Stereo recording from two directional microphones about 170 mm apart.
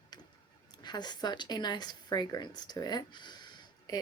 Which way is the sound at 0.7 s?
25° left (ahead or behind).